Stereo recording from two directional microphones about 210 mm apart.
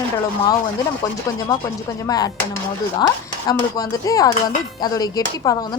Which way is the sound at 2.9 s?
20° left (ahead or behind).